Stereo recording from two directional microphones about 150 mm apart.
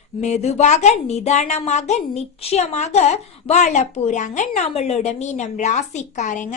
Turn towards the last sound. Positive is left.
turn(degrees=55)  # may be behind; listen again after turning